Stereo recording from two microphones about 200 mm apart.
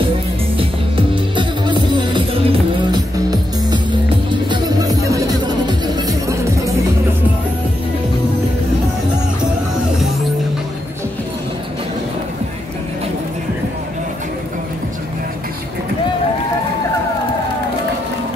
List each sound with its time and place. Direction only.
0.6 s music: 25° right (ahead or behind)